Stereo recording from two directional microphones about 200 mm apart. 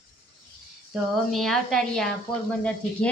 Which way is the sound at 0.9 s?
Centre (ahead or behind).